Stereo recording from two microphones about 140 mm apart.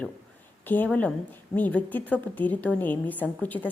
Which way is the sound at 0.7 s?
10° left (ahead or behind).